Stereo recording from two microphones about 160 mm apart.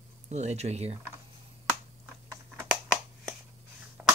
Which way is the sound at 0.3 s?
45° right (ahead or behind).